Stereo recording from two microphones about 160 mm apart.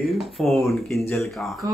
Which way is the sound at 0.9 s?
15° left (ahead or behind).